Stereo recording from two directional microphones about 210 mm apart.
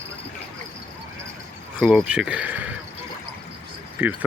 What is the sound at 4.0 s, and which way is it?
Speech, 10° right (ahead or behind).